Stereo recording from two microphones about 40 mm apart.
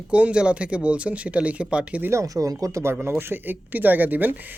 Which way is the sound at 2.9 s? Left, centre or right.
Right.